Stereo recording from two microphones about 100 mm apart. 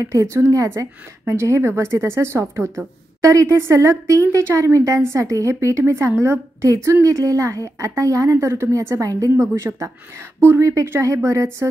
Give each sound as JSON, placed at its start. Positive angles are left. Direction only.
{"t": 0.0, "sound": "a woman's voice", "side_deg": -30}